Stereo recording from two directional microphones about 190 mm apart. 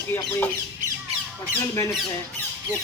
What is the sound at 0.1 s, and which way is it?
Speech, 10° left (ahead or behind).